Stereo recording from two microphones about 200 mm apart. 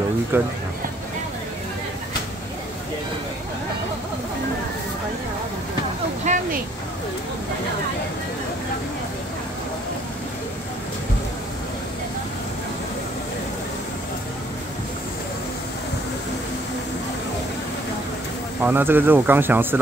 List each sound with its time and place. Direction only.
0.3 s speech: 10° right (ahead or behind)
6.3 s a sound: 35° right (ahead or behind)
18.7 s speech: 10° right (ahead or behind)